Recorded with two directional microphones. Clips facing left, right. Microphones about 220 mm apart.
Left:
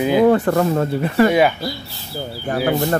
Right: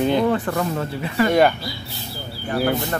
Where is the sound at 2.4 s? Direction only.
50° left (ahead or behind).